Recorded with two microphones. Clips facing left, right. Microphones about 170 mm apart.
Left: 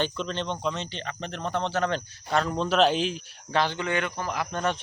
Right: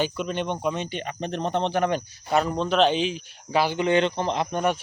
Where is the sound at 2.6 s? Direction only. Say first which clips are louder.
Right 1 dB; 5° left (ahead or behind); by 4.4 s 25° right (ahead or behind).